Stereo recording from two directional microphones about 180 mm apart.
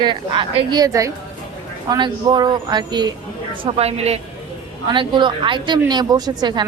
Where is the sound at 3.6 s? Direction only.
35° right (ahead or behind).